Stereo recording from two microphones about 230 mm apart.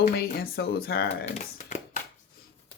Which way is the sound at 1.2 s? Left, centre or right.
Left.